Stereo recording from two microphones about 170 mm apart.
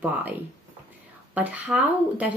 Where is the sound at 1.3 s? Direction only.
10° right (ahead or behind).